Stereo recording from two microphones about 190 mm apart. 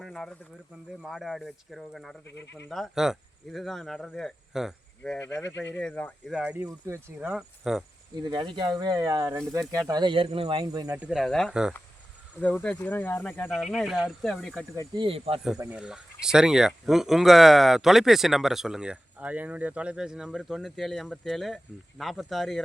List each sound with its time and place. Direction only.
0.0 s a sound: centre (ahead or behind)
1.0 s speech: centre (ahead or behind)
2.2 s speech: 65° left (ahead or behind)
2.6 s speech: centre (ahead or behind)
6.3 s speech: 5° right (ahead or behind)
7.3 s speech: 5° right (ahead or behind)
8.2 s speech: 25° right (ahead or behind)
10.9 s speech: 5° right (ahead or behind)
13.5 s speech: centre (ahead or behind)
14.9 s speech: 30° right (ahead or behind)
15.5 s speech: 10° right (ahead or behind)